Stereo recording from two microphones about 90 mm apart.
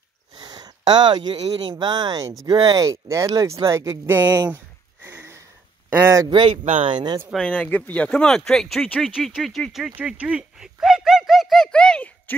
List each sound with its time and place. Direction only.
0.4 s speech: 50° right (ahead or behind)
2.9 s speech: 35° right (ahead or behind)
5.0 s sniff: 30° right (ahead or behind)
5.9 s speech: 25° right (ahead or behind)
6.2 s speech: 65° right (ahead or behind); by 7.0 s 85° right
7.3 s speech: 15° left (ahead or behind); by 9.9 s 5° right (ahead or behind)
9.9 s speech: 15° right (ahead or behind); by 12.1 s 10° left (ahead or behind)